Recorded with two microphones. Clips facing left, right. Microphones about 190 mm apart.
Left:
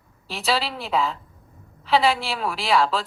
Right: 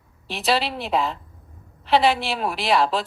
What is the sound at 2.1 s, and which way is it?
Speech, 20° right (ahead or behind).